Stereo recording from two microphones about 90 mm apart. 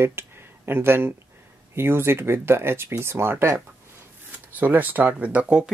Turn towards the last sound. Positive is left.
turn(degrees=-15)  # may be behind; listen again after turning